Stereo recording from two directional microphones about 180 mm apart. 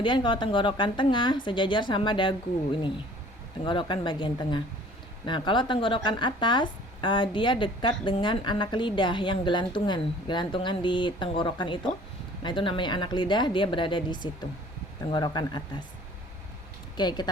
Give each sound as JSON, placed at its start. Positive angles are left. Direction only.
{"t": 0.0, "sound": "speech", "side_deg": 25}
{"t": 3.6, "sound": "speech", "side_deg": 25}
{"t": 17.0, "sound": "speech", "side_deg": 25}